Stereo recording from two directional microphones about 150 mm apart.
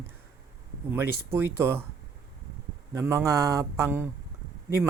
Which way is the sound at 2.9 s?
20° right (ahead or behind).